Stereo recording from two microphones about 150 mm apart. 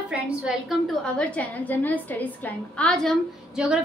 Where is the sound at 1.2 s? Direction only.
10° left (ahead or behind).